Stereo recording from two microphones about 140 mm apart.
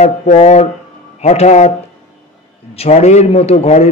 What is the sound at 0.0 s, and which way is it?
A man's voice, 55° left (ahead or behind).